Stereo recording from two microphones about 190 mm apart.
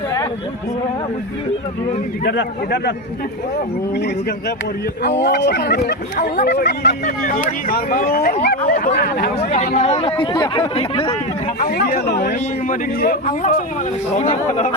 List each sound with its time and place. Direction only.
2.2 s speech: 60° left (ahead or behind)
3.9 s speech: 60° left (ahead or behind)
9.5 s speech: 35° left (ahead or behind)
11.6 s speech: 55° left (ahead or behind)
14.1 s speech: 35° left (ahead or behind)